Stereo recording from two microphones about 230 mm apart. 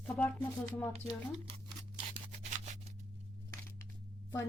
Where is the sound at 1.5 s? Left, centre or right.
Right.